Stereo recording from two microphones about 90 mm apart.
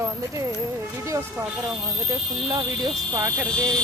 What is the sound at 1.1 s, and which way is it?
Speech, 30° right (ahead or behind).